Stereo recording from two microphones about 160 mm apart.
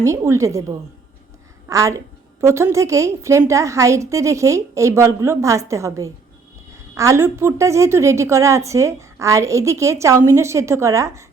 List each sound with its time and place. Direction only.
0.0 s a woman's voice: 20° right (ahead or behind)